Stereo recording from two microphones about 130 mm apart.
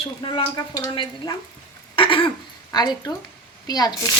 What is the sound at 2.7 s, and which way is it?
A child's voice, 30° left (ahead or behind).